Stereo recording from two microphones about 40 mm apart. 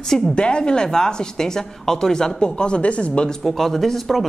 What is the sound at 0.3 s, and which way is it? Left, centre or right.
A woman's voice, left.